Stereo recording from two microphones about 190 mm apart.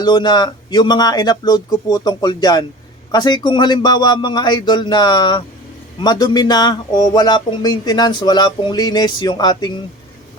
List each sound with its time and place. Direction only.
0.0 s speech: 20° left (ahead or behind)